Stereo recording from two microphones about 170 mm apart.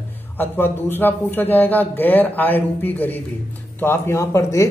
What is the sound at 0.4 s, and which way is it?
Speech, 10° left (ahead or behind).